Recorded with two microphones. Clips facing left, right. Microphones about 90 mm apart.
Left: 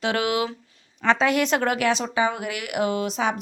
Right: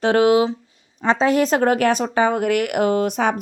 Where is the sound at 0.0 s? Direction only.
35° right (ahead or behind).